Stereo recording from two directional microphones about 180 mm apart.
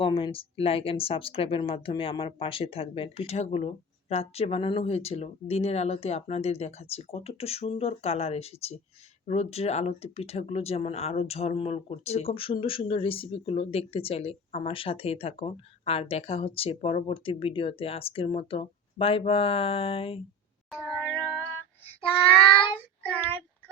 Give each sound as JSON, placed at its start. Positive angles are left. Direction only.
{"t": 0.0, "sound": "speech", "side_deg": 30}
{"t": 20.7, "sound": "music", "side_deg": 0}
{"t": 23.1, "sound": "a child's voice", "side_deg": 10}